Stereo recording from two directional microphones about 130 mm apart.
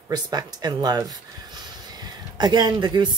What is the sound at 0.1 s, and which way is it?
Speech, 30° right (ahead or behind).